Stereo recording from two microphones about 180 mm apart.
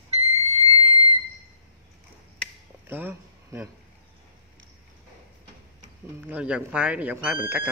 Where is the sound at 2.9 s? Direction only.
10° right (ahead or behind).